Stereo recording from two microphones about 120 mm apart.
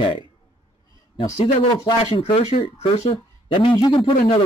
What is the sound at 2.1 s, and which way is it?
A man's voice, 55° left (ahead or behind).